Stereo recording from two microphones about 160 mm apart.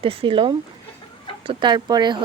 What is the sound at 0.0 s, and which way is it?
Speech, 35° right (ahead or behind).